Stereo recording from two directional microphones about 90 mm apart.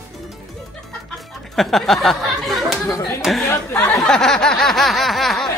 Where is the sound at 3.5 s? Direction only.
25° left (ahead or behind).